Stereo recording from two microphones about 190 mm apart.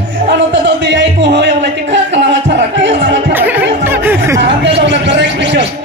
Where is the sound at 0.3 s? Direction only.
70° right (ahead or behind).